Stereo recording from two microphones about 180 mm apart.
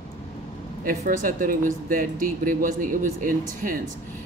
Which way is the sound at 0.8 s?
50° right (ahead or behind).